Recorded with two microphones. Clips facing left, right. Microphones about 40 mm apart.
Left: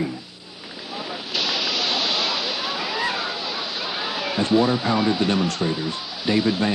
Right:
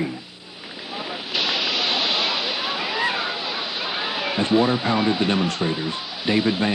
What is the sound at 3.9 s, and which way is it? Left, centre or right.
Speech, right.